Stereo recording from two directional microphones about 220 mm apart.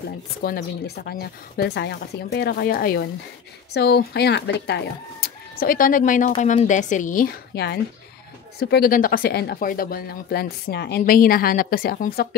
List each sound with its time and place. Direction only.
0.4 s speech: 45° left (ahead or behind)